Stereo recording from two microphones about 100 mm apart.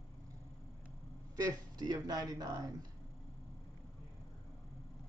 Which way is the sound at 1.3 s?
35° right (ahead or behind).